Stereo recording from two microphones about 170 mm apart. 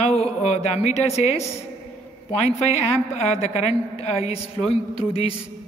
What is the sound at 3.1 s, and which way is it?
A woman's voice, 40° left (ahead or behind).